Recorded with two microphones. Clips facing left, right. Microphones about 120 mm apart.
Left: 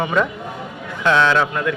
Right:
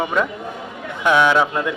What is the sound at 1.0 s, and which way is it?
Speech, 15° right (ahead or behind).